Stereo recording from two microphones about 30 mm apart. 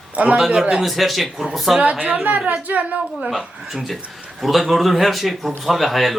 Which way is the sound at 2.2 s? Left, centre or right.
Right.